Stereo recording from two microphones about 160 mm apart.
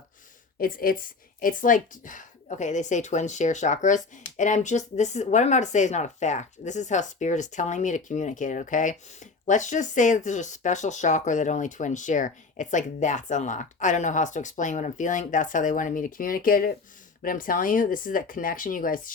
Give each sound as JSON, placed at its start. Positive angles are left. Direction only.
{"t": 0.6, "sound": "a woman's voice", "side_deg": 60}